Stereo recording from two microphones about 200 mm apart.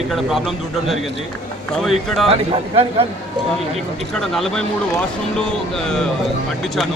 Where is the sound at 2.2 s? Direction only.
30° right (ahead or behind).